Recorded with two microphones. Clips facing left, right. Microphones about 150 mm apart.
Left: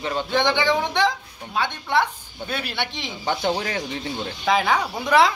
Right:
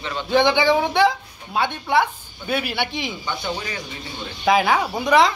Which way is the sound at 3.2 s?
75° left (ahead or behind).